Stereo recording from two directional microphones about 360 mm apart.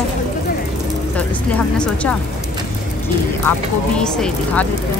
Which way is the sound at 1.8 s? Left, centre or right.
Centre.